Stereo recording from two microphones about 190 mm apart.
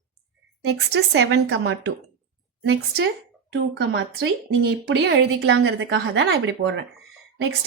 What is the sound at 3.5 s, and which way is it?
A woman's voice, 65° right (ahead or behind).